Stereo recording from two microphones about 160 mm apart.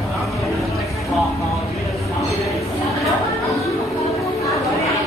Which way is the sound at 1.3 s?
20° left (ahead or behind).